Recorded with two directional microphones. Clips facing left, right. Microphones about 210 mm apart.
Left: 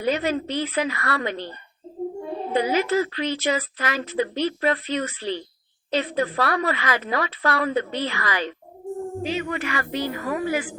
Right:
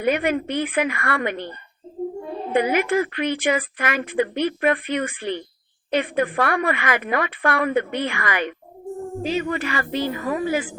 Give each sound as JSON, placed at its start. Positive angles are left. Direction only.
{"t": 0.0, "sound": "a woman's voice", "side_deg": -55}
{"t": 2.6, "sound": "a woman's voice", "side_deg": -55}
{"t": 9.2, "sound": "a woman's voice", "side_deg": -40}